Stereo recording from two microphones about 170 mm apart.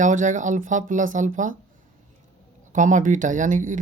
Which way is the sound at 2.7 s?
50° right (ahead or behind).